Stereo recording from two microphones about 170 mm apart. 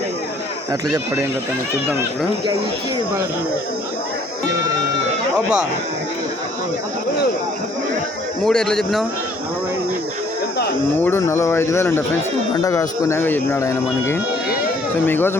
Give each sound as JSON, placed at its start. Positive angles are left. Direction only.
{"t": 0.7, "sound": "speech", "side_deg": -20}
{"t": 8.4, "sound": "speech", "side_deg": 5}
{"t": 11.0, "sound": "speech", "side_deg": 15}